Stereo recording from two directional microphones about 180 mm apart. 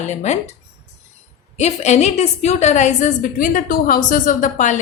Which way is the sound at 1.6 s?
40° left (ahead or behind).